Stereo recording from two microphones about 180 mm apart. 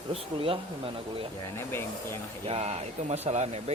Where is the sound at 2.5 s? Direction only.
35° right (ahead or behind).